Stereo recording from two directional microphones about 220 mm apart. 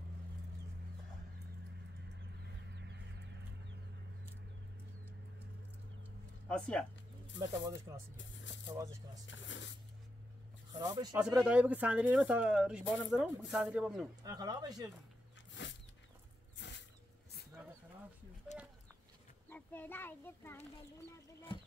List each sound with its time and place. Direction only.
2.7 s chicken: 50° right (ahead or behind)
6.5 s speech: 5° left (ahead or behind)
7.3 s speech: 15° right (ahead or behind)
9.3 s a sound: 55° left (ahead or behind)
10.7 s speech: 15° right (ahead or behind)
11.1 s speech: 5° right (ahead or behind)
14.2 s speech: 15° right (ahead or behind)
15.6 s a sound: 55° left (ahead or behind)
19.5 s a child's voice: 10° left (ahead or behind)